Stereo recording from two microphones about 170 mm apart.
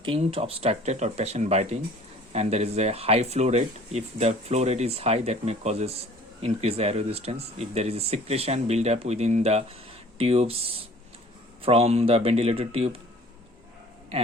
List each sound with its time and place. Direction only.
0.0 s speech: 35° right (ahead or behind)